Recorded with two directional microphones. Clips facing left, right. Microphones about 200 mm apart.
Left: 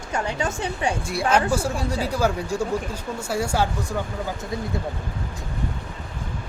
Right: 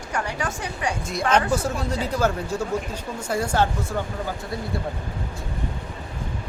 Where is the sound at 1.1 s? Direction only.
10° left (ahead or behind).